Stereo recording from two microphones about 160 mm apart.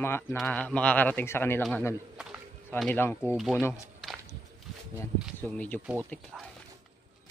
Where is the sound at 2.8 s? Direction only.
10° left (ahead or behind).